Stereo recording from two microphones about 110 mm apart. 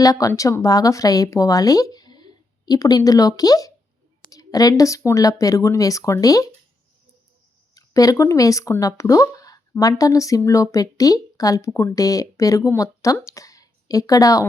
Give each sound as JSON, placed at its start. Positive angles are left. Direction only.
{"t": 0.0, "sound": "speech", "side_deg": 30}
{"t": 7.8, "sound": "speech", "side_deg": 30}